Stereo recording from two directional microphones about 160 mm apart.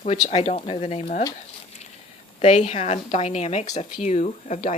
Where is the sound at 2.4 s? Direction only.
45° left (ahead or behind).